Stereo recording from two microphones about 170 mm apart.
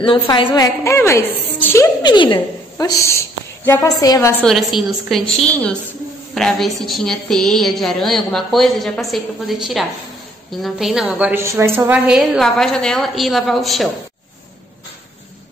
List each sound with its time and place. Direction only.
0.0 s a woman's voice: 30° left (ahead or behind)
0.8 s a woman's voice: 15° left (ahead or behind)
2.0 s a woman's voice: 30° left (ahead or behind)
3.0 s a woman's voice: 15° left (ahead or behind)
4.5 s a woman's voice: centre (ahead or behind)